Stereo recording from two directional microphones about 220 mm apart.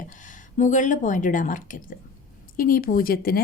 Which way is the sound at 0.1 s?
35° left (ahead or behind).